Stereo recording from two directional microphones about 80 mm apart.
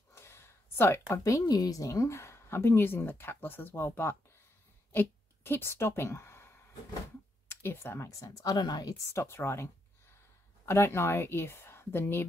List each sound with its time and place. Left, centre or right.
0.1 s a woman's voice: left
4.9 s a sound: left
7.4 s speech: left
8.1 s speech: left
8.9 s speech: left